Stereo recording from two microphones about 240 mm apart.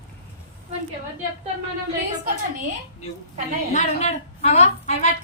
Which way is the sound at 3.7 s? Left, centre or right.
Left.